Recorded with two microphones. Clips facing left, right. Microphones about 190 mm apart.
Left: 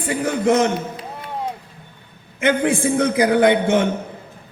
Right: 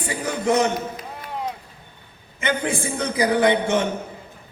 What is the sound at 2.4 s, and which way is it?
A man's voice, 55° left (ahead or behind).